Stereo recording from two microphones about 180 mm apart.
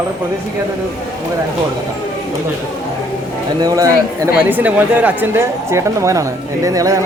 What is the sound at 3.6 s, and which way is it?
Speech, 20° right (ahead or behind).